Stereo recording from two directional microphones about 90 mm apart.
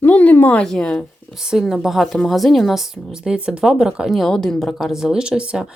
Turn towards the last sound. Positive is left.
turn(degrees=-10)  # may be behind; listen again after turning